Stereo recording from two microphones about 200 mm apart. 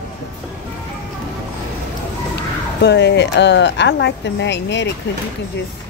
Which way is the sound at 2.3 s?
55° left (ahead or behind).